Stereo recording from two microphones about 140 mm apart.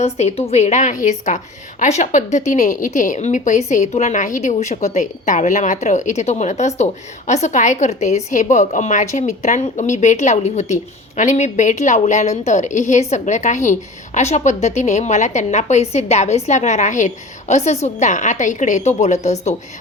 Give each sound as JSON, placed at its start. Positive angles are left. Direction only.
{"t": 0.0, "sound": "a woman's voice", "side_deg": 50}